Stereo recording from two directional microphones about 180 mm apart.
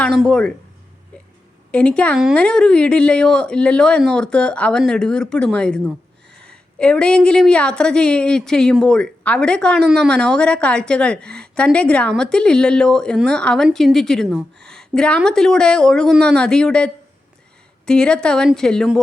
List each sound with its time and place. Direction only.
0.0 s a woman's voice: 5° left (ahead or behind)
1.7 s a woman's voice: 5° left (ahead or behind)